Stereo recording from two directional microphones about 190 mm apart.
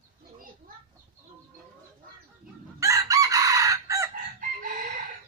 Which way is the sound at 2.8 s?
15° right (ahead or behind).